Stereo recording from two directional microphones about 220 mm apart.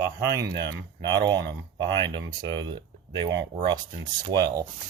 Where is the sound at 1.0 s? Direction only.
20° right (ahead or behind).